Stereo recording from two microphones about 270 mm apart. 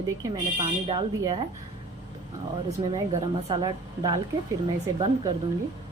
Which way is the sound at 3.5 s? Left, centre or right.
Centre.